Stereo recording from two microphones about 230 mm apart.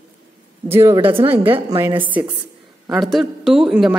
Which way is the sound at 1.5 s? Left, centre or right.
Centre.